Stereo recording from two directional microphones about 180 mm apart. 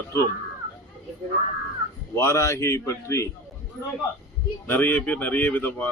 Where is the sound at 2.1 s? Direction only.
15° left (ahead or behind).